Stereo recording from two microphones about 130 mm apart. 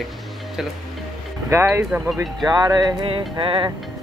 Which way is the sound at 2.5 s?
30° right (ahead or behind).